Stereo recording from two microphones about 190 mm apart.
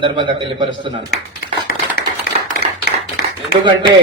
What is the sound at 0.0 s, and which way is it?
A man's voice, 25° right (ahead or behind).